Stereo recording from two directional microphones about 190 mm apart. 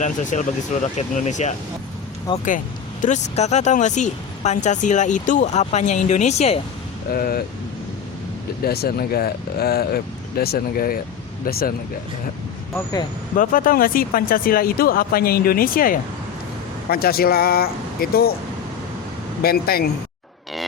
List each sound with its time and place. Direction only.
0.0 s speech: 40° left (ahead or behind)
2.3 s speech: 25° left (ahead or behind)
3.0 s speech: 35° left (ahead or behind)
7.1 s speech: 50° left (ahead or behind)
8.6 s speech: 55° left (ahead or behind)
13.3 s speech: 45° left (ahead or behind)
19.4 s speech: 55° left (ahead or behind)